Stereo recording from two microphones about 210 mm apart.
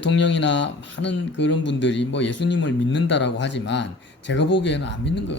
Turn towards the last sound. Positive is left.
turn(degrees=55)  # may be behind; listen again after turning